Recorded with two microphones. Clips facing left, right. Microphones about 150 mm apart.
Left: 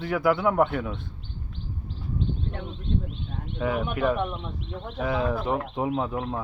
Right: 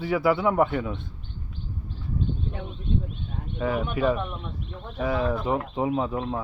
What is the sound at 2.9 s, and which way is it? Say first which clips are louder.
Speech: right 1 dB; 10° right (ahead or behind).